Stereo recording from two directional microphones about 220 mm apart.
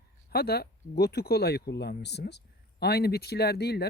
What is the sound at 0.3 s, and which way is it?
Speech, 45° left (ahead or behind).